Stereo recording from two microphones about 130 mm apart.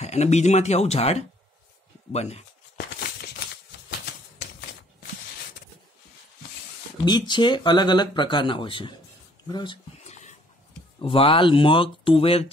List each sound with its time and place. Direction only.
0.0 s speech: 60° left (ahead or behind)
7.1 s speech: 35° left (ahead or behind)
9.9 s a sound: 60° left (ahead or behind)
11.0 s speech: 45° left (ahead or behind)